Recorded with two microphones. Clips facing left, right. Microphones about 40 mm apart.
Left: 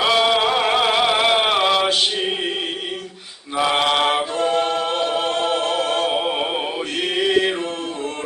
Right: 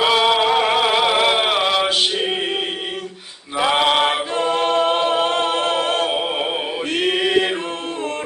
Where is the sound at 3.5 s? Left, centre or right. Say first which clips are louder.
Right 2 dB; centre.